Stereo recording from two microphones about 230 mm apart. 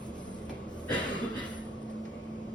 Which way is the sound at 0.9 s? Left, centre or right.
Centre.